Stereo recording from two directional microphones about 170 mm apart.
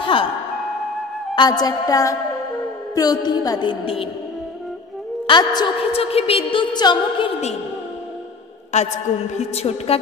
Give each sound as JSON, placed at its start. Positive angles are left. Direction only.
{"t": 0.0, "sound": "music", "side_deg": 30}
{"t": 1.3, "sound": "a woman's voice", "side_deg": 25}
{"t": 5.2, "sound": "a woman's voice", "side_deg": 25}
{"t": 8.7, "sound": "a woman's voice", "side_deg": 45}